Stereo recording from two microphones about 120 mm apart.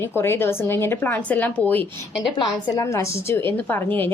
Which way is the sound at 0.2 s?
20° left (ahead or behind).